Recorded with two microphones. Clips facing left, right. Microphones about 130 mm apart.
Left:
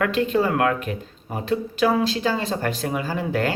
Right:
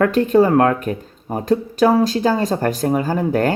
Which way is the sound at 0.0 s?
45° right (ahead or behind).